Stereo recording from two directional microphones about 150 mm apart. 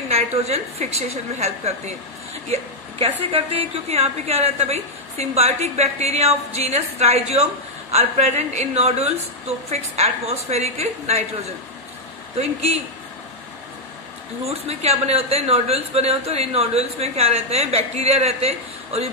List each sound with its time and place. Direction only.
0.1 s a woman's voice: 45° right (ahead or behind)
14.4 s a woman's voice: 45° right (ahead or behind)